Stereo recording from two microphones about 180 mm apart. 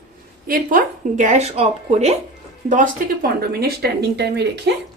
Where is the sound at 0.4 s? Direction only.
50° right (ahead or behind).